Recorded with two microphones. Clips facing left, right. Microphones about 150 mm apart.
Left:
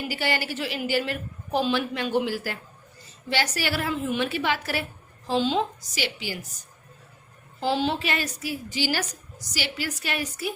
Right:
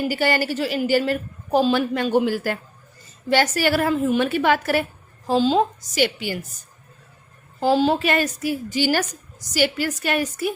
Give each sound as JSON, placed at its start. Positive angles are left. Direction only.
{"t": 0.1, "sound": "a woman's voice", "side_deg": -45}
{"t": 7.6, "sound": "a woman's voice", "side_deg": -45}